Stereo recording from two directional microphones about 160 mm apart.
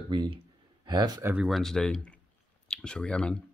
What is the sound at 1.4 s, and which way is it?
Speech, centre (ahead or behind).